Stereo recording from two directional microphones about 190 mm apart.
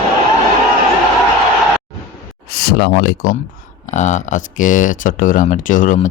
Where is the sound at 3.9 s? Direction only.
40° left (ahead or behind).